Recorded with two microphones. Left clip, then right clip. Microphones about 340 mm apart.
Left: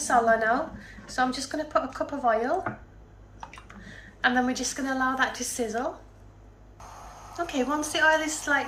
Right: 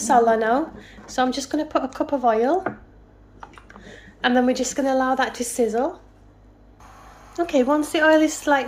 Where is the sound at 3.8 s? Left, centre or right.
Right.